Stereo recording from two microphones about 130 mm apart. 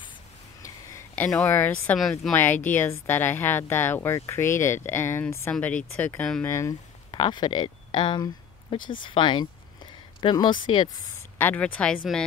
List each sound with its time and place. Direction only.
0.6 s a woman's voice: 20° left (ahead or behind); by 2.3 s centre (ahead or behind)
2.3 s speech: 15° left (ahead or behind)
6.4 s speech: 25° left (ahead or behind)
7.1 s speech: 35° left (ahead or behind)
11.3 s speech: 15° left (ahead or behind)